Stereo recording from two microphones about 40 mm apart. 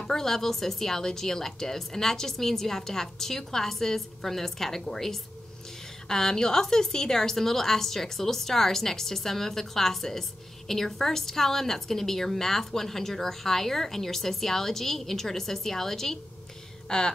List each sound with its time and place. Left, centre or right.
0.0 s a woman's voice: centre